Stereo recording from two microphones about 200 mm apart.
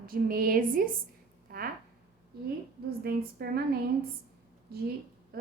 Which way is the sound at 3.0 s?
50° right (ahead or behind).